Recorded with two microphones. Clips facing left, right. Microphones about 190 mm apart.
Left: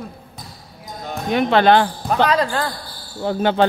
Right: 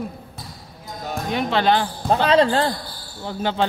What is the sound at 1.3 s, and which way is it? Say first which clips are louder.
Speech: left 6 dB; 60° left (ahead or behind).